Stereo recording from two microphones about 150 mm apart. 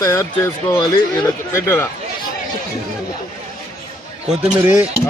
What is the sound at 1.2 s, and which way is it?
Speech, 15° left (ahead or behind).